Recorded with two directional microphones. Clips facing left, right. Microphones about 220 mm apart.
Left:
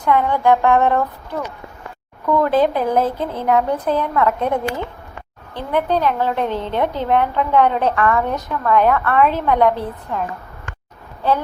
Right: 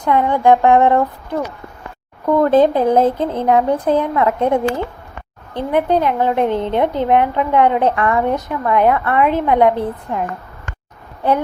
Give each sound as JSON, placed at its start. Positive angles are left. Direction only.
{"t": 0.0, "sound": "a woman's voice", "side_deg": -20}
{"t": 2.5, "sound": "a woman's voice", "side_deg": -20}